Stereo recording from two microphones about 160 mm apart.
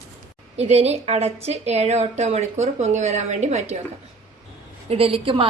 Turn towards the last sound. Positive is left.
turn(degrees=-35)  # may be behind; listen again after turning